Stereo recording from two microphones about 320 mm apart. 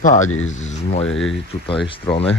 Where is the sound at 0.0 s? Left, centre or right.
Left.